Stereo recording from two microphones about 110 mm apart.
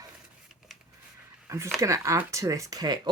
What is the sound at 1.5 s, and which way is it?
Speech, 25° right (ahead or behind).